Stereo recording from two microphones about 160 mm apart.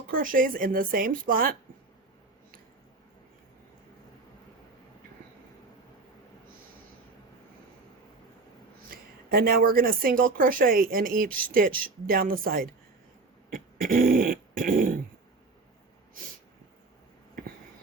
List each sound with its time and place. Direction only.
0.1 s speech: 60° right (ahead or behind)
9.3 s speech: 65° right (ahead or behind)
13.5 s dog: 65° right (ahead or behind)